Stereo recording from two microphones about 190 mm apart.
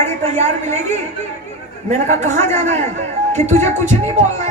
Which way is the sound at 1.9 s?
40° right (ahead or behind).